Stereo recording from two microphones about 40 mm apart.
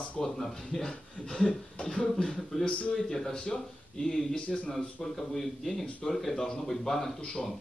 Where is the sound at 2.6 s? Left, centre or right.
Left.